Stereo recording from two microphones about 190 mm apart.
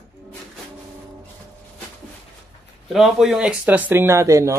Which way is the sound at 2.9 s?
Centre (ahead or behind).